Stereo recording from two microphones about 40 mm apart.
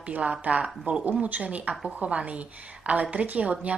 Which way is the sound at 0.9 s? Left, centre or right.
Right.